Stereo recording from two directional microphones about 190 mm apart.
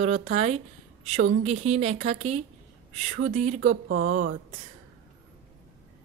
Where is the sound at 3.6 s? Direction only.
90° right.